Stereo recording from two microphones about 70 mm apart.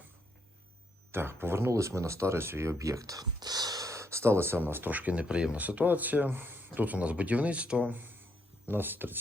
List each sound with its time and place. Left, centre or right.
1.1 s speech: right; by 7.9 s centre
8.6 s speech: right